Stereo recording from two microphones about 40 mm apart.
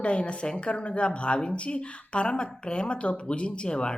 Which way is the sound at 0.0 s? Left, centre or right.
Left.